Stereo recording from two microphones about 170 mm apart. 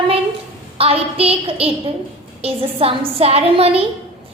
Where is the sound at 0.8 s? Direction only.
35° right (ahead or behind).